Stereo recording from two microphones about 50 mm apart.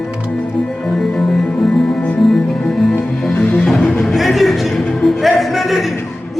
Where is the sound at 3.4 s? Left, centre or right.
Left.